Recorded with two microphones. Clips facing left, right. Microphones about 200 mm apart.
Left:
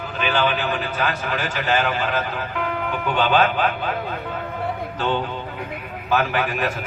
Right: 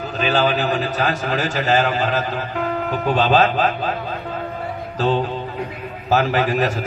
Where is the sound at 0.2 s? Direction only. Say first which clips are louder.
Right 3 dB; 40° right (ahead or behind).